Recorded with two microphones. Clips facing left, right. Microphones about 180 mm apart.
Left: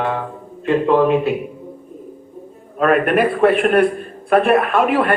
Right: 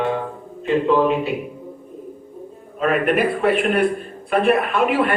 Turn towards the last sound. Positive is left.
turn(degrees=55)  # may be behind; listen again after turning